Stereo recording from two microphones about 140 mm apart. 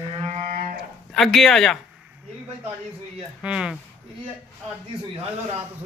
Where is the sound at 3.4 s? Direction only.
5° right (ahead or behind).